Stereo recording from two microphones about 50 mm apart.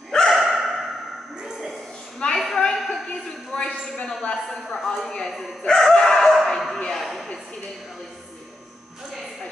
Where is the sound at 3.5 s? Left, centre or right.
Centre.